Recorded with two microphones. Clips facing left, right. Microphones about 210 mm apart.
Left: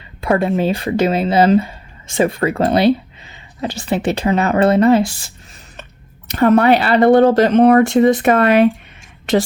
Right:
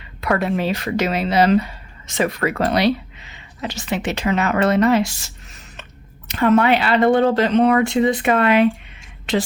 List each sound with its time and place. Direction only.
0.2 s speech: 30° left (ahead or behind); by 8.7 s 45° left (ahead or behind)